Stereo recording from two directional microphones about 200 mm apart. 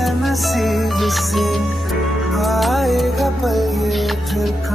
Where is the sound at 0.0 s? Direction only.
Centre (ahead or behind).